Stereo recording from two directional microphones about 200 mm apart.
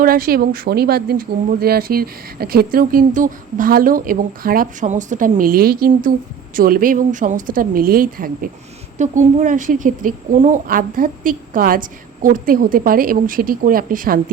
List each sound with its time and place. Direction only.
0.0 s speech: 45° right (ahead or behind)